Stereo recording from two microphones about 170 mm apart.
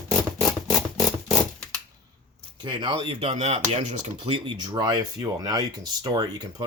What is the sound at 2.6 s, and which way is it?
Speech, 30° right (ahead or behind).